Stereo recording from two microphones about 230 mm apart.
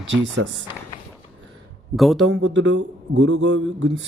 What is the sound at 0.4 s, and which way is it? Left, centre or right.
Speech, right.